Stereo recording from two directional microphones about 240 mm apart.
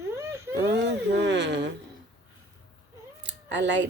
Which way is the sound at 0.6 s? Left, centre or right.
Right.